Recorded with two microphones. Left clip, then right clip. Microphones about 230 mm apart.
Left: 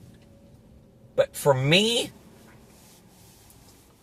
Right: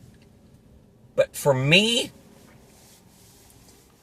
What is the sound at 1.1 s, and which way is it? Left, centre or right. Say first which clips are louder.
Speech: right 1 dB; right.